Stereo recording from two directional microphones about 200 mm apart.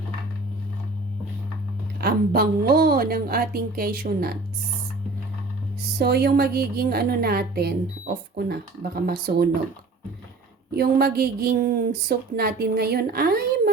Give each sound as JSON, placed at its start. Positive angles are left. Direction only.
{"t": 2.0, "sound": "a woman's voice", "side_deg": -50}
{"t": 6.0, "sound": "a woman's voice", "side_deg": -55}
{"t": 10.8, "sound": "a woman's voice", "side_deg": -50}